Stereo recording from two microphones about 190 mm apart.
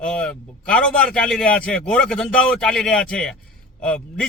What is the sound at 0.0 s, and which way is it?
A man's voice, 5° left (ahead or behind).